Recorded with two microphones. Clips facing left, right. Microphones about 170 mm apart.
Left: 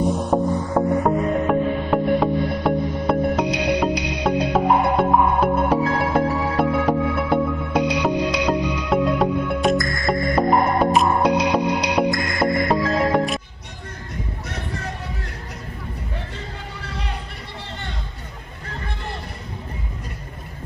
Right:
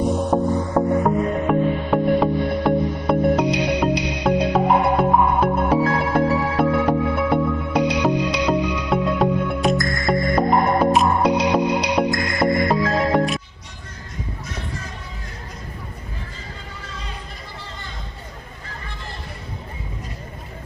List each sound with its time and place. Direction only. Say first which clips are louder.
0.3 s music: right 1 dB; centre (ahead or behind)
14.5 s music: left 2 dB; 65° left (ahead or behind)
16.7 s a sound: left 4 dB; 65° left (ahead or behind)